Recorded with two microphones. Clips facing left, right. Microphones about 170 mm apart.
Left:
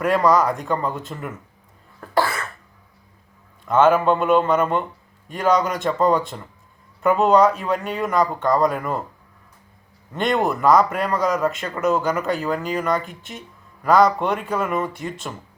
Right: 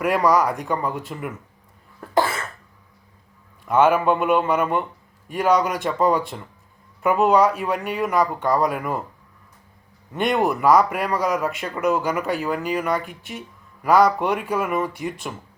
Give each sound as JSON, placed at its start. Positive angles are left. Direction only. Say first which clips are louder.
{"t": 0.0, "sound": "speech", "louder": "left 1 dB", "side_deg": -10}
{"t": 2.0, "sound": "cough", "louder": "even", "side_deg": -20}
{"t": 3.7, "sound": "speech", "louder": "left 1 dB", "side_deg": -10}
{"t": 10.2, "sound": "speech", "louder": "even", "side_deg": -10}